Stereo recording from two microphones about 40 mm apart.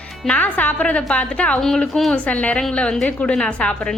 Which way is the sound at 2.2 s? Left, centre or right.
Left.